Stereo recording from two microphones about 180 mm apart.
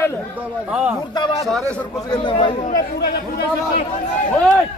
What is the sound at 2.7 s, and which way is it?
Speech, 60° left (ahead or behind).